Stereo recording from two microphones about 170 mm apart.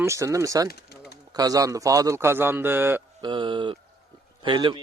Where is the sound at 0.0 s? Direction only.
15° right (ahead or behind).